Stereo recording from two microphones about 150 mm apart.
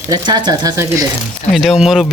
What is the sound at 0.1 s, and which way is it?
Speech, 30° right (ahead or behind).